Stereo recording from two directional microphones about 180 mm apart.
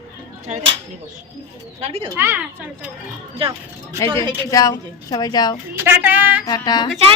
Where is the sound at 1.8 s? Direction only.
35° right (ahead or behind).